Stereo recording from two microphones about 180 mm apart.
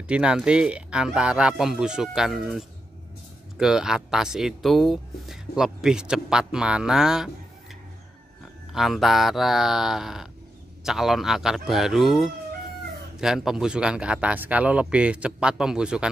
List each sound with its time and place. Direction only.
0.1 s speech: 5° right (ahead or behind)
8.7 s speech: centre (ahead or behind)